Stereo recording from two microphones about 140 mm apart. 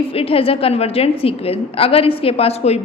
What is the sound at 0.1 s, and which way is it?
A woman's voice, 40° left (ahead or behind).